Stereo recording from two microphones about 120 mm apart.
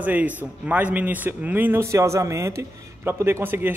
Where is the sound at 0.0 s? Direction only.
15° right (ahead or behind).